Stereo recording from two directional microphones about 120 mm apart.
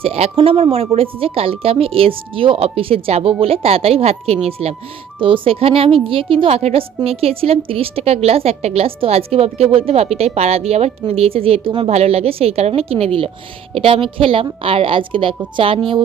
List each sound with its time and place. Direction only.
0.0 s a woman's voice: 55° right (ahead or behind)